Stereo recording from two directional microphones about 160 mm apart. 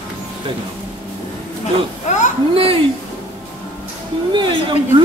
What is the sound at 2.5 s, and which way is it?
Speech, 35° right (ahead or behind).